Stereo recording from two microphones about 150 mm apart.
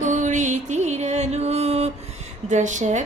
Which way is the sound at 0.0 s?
55° right (ahead or behind).